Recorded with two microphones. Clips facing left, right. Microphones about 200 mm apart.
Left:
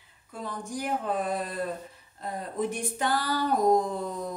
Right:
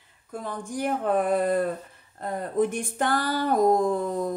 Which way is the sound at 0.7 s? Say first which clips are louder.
Right 5 dB; 60° right (ahead or behind).